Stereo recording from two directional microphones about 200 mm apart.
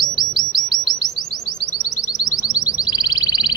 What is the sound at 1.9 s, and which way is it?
Music, 20° left (ahead or behind).